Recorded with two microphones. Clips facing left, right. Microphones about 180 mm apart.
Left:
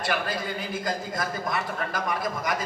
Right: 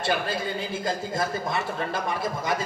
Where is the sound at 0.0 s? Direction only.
25° right (ahead or behind).